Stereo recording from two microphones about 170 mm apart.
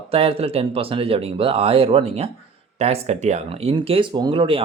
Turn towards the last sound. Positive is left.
turn(degrees=-30)  # may be behind; listen again after turning